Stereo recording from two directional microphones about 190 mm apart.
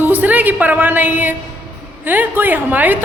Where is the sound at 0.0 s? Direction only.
10° right (ahead or behind).